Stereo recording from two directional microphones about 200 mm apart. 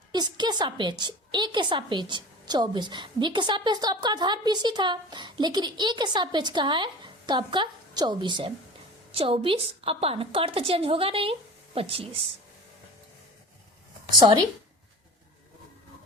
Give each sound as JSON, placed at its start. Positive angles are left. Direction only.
{"t": 0.1, "sound": "a woman's voice", "side_deg": -20}